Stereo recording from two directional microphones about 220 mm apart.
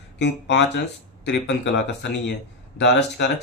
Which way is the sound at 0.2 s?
50° left (ahead or behind).